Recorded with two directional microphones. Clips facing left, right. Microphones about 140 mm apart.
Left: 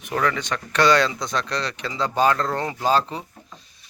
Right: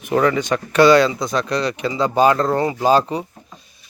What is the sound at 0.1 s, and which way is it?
Speech, 25° right (ahead or behind).